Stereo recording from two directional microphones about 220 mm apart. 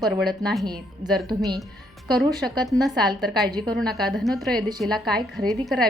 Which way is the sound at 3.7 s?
Centre (ahead or behind).